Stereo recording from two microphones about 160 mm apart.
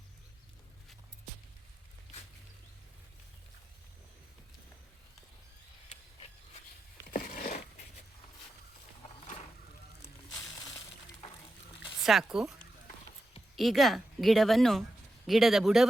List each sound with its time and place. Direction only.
7.1 s a sound: 70° left (ahead or behind)
12.0 s speech: 5° right (ahead or behind)
13.6 s speech: centre (ahead or behind)